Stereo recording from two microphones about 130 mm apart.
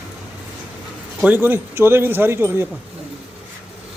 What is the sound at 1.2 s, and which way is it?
Speech, 15° right (ahead or behind).